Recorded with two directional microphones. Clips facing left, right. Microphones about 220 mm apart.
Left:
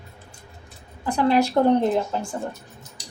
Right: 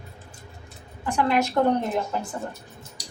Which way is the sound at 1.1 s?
35° left (ahead or behind).